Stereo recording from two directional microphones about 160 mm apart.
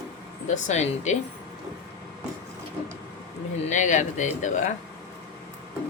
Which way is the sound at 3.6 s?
50° left (ahead or behind).